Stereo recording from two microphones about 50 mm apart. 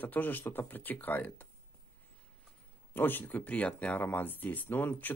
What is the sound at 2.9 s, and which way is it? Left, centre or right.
Speech, left.